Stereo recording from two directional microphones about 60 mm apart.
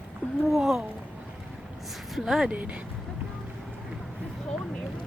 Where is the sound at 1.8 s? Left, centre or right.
Centre.